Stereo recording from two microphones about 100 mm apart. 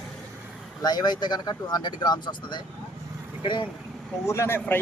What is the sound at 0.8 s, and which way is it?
Speech, 45° left (ahead or behind).